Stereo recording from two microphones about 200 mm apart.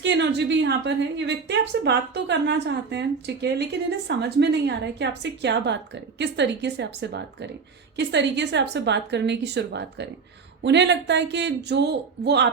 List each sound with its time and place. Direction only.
0.0 s a woman's voice: 60° right (ahead or behind)